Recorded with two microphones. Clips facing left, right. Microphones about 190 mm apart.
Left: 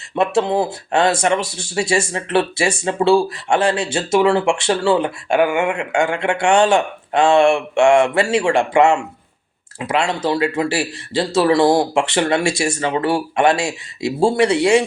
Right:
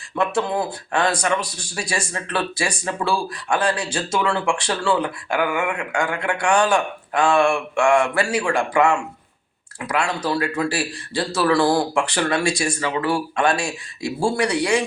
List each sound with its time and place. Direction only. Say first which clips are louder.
0.2 s speech: left 5 dB; 25° left (ahead or behind)